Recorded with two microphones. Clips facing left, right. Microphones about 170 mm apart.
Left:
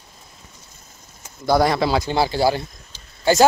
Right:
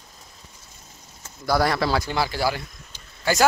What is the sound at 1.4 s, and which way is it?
Speech, 20° left (ahead or behind).